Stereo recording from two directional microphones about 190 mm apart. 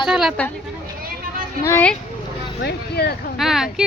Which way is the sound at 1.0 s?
50° right (ahead or behind).